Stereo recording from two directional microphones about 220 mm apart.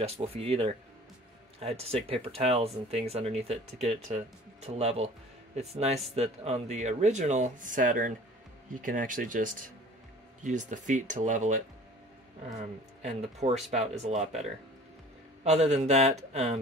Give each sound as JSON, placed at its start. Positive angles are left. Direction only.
{"t": 0.0, "sound": "speech", "side_deg": -30}
{"t": 13.7, "sound": "speech", "side_deg": -30}
{"t": 15.4, "sound": "a man's voice", "side_deg": -30}